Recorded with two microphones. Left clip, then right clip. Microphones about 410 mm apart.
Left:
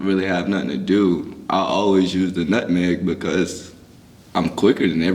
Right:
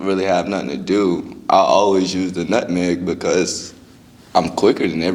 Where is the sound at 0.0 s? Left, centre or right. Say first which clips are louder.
Right 4 dB; right.